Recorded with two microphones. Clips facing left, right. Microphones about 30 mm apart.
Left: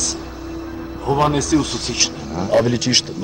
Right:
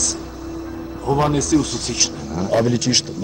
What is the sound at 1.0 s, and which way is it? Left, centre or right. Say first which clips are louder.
A man's voice: left 1 dB; centre.